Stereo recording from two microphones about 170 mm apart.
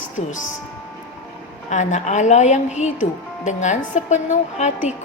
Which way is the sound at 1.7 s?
45° left (ahead or behind).